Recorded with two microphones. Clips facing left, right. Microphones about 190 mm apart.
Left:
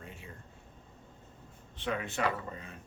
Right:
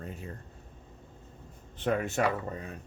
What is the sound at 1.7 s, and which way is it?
Speech, 45° right (ahead or behind).